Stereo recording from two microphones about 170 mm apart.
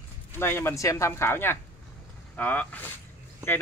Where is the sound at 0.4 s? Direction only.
15° left (ahead or behind).